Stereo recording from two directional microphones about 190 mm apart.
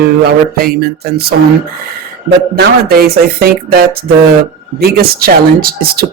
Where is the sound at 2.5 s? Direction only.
55° right (ahead or behind).